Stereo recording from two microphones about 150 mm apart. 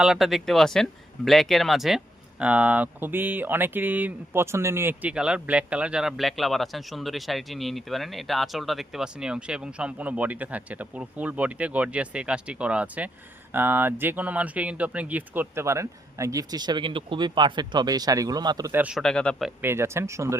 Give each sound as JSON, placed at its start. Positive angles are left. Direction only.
{"t": 0.0, "sound": "speech", "side_deg": -5}
{"t": 18.7, "sound": "speech", "side_deg": -10}
{"t": 18.9, "sound": "speech", "side_deg": 5}
{"t": 19.6, "sound": "speech", "side_deg": -15}